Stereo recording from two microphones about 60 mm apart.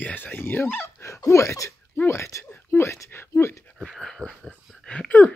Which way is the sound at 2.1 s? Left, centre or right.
Left.